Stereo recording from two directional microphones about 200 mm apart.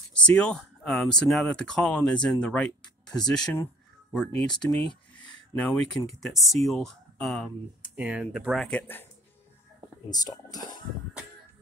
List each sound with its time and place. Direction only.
0.1 s speech: 5° left (ahead or behind)
10.0 s speech: 20° left (ahead or behind)